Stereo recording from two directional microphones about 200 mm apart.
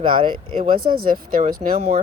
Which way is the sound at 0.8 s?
45° right (ahead or behind).